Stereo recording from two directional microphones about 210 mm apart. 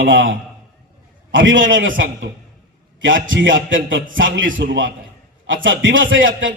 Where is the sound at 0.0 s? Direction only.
65° right (ahead or behind).